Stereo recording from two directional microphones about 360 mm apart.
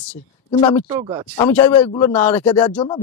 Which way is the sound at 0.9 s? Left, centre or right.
Centre.